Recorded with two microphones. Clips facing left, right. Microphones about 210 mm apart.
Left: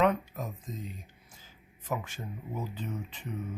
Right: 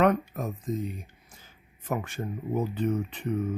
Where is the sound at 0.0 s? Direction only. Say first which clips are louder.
Right 4 dB; 55° right (ahead or behind).